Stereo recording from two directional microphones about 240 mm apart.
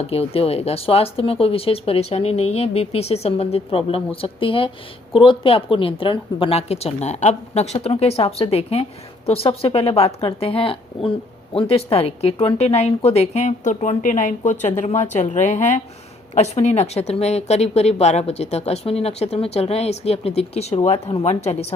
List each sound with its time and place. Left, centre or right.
0.0 s speech: left